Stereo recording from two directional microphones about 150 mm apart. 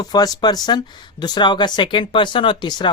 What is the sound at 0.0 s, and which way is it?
Speech, 25° left (ahead or behind).